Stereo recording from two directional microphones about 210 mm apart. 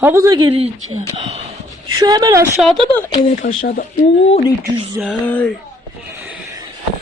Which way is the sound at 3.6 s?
40° left (ahead or behind).